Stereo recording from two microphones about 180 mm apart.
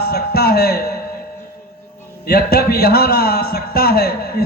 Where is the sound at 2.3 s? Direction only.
60° left (ahead or behind).